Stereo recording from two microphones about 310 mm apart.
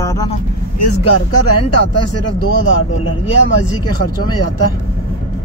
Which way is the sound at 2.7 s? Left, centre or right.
Left.